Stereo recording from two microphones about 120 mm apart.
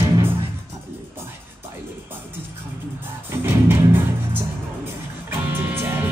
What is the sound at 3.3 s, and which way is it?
Music, 20° right (ahead or behind).